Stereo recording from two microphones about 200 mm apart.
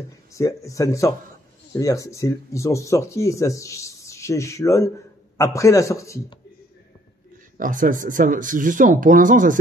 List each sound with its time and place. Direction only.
0.3 s speech: 15° left (ahead or behind)
7.5 s speech: 40° right (ahead or behind)